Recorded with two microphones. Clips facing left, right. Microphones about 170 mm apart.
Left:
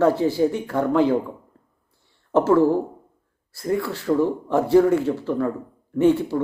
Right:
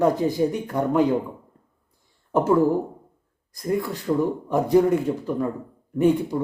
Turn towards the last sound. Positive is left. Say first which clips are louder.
# left 2 dB
turn(degrees=-15)  # may be behind; listen again after turning